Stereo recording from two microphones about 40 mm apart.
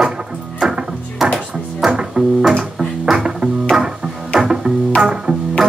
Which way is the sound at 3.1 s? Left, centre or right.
Right.